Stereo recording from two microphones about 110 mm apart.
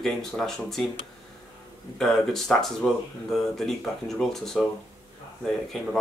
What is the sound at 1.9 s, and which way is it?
Speech, 5° left (ahead or behind).